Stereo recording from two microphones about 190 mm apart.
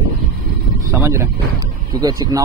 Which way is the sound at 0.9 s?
15° right (ahead or behind).